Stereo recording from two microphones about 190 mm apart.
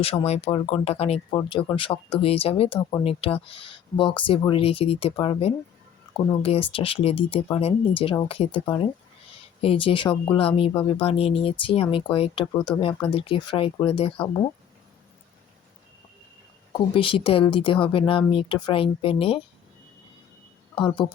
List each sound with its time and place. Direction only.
0.3 s speech: 30° left (ahead or behind)
16.9 s speech: 30° left (ahead or behind)
20.8 s speech: 25° left (ahead or behind)